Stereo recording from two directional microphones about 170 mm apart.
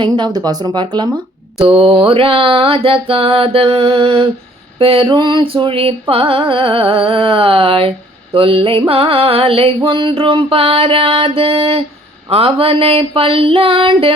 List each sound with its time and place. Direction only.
0.0 s speech: 25° right (ahead or behind)
1.5 s music: 35° right (ahead or behind)